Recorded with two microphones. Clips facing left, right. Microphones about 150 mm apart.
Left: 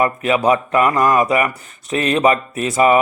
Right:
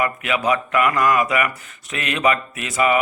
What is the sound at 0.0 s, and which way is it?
Speech, 35° left (ahead or behind).